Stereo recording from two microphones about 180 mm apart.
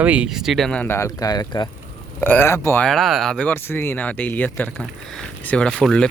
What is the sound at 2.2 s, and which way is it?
Speech, 10° left (ahead or behind).